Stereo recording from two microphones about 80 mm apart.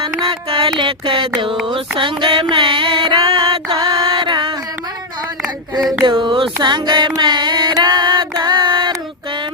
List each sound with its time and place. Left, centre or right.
0.8 s a sound: right
1.6 s mantra: right
6.1 s music: right
7.8 s female singing: right